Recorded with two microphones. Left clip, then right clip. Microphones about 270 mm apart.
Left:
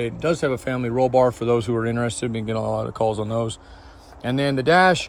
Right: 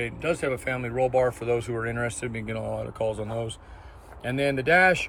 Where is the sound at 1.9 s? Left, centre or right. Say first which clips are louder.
Left 5 dB; left.